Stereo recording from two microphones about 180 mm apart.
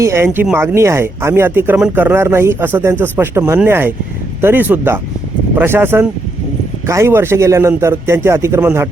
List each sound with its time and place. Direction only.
0.0 s speech: 15° right (ahead or behind)